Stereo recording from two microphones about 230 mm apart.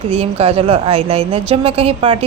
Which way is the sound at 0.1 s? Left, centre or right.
Right.